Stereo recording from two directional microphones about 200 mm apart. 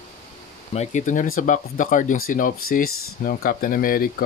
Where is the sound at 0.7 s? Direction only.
35° left (ahead or behind).